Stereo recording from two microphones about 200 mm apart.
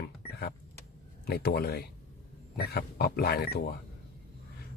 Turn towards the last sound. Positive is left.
turn(degrees=50)  # may be behind; listen again after turning